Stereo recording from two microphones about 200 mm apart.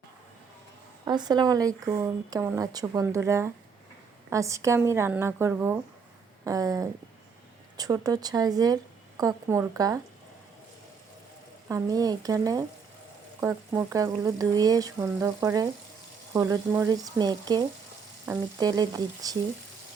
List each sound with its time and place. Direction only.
1.0 s a woman's voice: 20° right (ahead or behind)
11.7 s a woman's voice: 20° right (ahead or behind)